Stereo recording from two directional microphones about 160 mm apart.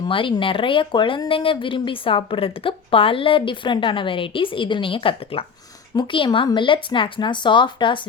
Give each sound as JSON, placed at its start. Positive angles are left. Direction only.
{"t": 0.0, "sound": "speech", "side_deg": 30}